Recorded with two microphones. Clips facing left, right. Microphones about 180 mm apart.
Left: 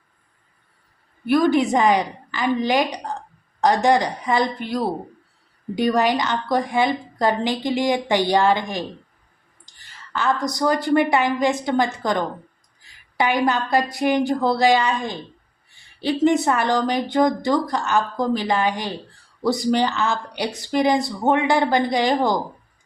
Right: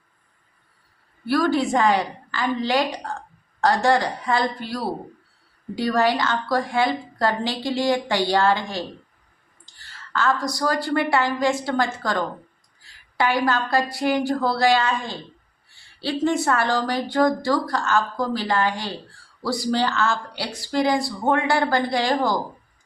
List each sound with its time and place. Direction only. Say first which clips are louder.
1.2 s a woman's voice: left 3 dB; 20° left (ahead or behind)